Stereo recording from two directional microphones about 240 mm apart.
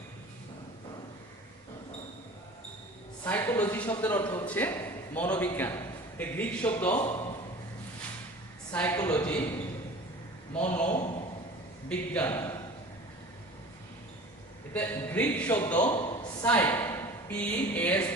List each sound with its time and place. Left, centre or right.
3.2 s a man's voice: centre
8.7 s a man's voice: centre
10.8 s a man's voice: left
11.9 s a man's voice: centre
14.7 s a man's voice: centre